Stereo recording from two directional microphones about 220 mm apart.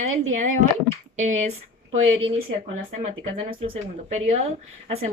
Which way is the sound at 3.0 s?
25° right (ahead or behind).